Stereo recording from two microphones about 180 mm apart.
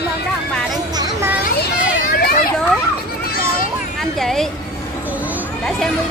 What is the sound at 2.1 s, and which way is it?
Speech, 55° left (ahead or behind).